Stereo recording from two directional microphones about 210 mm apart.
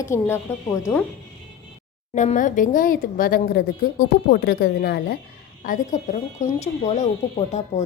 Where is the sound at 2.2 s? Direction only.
35° left (ahead or behind).